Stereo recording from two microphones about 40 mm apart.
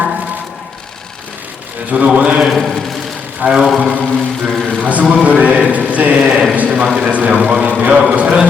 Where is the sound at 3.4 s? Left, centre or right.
Right.